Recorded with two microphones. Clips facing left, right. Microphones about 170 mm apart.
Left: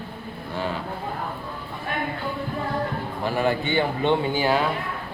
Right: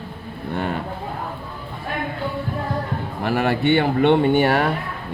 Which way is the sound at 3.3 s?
65° right (ahead or behind).